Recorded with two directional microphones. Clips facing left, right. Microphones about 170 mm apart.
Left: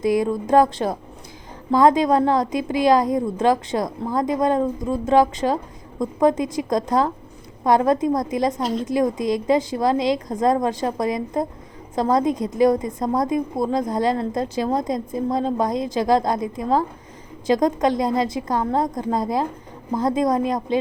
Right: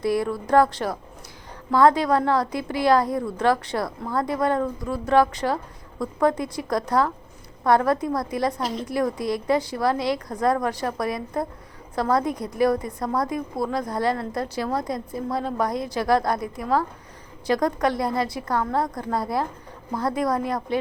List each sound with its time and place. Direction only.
0.0 s a woman's voice: 20° left (ahead or behind)